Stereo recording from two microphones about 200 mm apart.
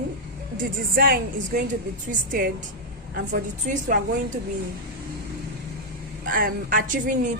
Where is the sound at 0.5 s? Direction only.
45° right (ahead or behind).